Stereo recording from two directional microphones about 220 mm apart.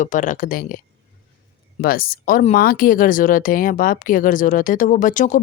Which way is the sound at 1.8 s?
40° left (ahead or behind).